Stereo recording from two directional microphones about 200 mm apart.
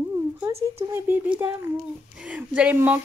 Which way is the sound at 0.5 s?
30° right (ahead or behind).